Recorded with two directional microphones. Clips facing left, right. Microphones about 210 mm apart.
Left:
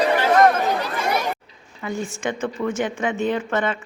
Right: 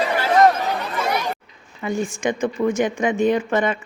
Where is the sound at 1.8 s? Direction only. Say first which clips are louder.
Right 4 dB; 15° right (ahead or behind).